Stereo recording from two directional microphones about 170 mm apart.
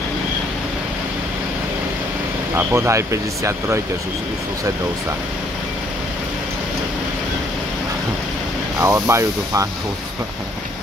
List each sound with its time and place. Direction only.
2.5 s speech: 15° right (ahead or behind)
8.8 s speech: 15° right (ahead or behind)